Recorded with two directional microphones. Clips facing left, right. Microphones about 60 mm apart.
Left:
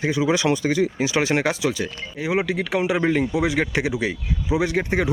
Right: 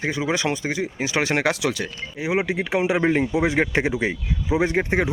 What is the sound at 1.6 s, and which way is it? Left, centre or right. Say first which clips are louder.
Speech: left 1 dB; right.